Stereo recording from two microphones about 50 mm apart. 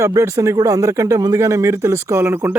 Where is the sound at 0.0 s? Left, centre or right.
Right.